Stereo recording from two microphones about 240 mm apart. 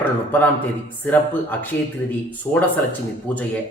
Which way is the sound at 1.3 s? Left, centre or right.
Centre.